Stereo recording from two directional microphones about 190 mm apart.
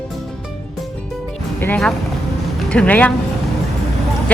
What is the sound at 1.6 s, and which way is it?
Speech, 5° left (ahead or behind).